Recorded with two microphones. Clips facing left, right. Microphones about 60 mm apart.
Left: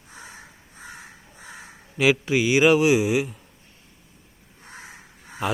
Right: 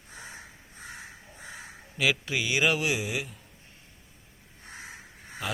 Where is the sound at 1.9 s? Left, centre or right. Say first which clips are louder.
Left 8 dB; left.